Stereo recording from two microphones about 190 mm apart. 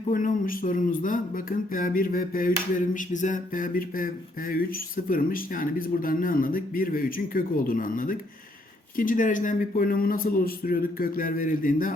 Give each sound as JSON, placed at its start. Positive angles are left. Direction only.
{"t": 0.1, "sound": "speech", "side_deg": 45}